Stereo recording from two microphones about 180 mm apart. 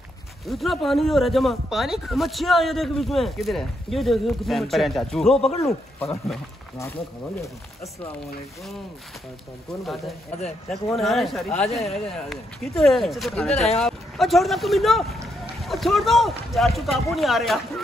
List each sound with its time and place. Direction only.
0.5 s speech: centre (ahead or behind)
5.6 s speech: 15° left (ahead or behind)
9.8 s speech: centre (ahead or behind)